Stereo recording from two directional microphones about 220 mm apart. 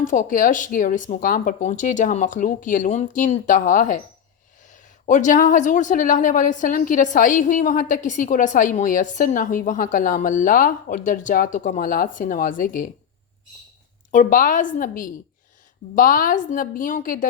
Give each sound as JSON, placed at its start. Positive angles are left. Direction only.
{"t": 0.1, "sound": "a woman's voice", "side_deg": 35}
{"t": 5.0, "sound": "a woman's voice", "side_deg": 35}
{"t": 14.1, "sound": "a woman's voice", "side_deg": 35}